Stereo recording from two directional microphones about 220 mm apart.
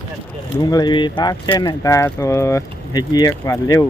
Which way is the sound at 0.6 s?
20° left (ahead or behind).